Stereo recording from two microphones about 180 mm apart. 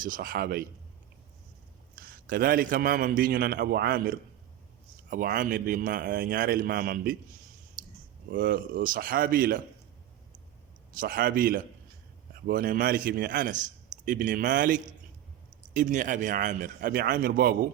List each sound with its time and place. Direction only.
0.0 s a man's voice: 50° right (ahead or behind)
2.0 s a man's voice: 55° right (ahead or behind)
8.3 s a man's voice: 50° right (ahead or behind)
10.9 s a man's voice: 50° right (ahead or behind)